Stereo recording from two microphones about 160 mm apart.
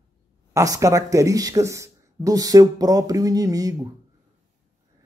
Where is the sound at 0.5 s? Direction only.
20° right (ahead or behind).